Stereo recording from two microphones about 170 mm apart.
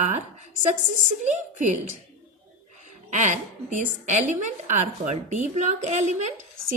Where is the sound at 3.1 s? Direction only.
45° right (ahead or behind).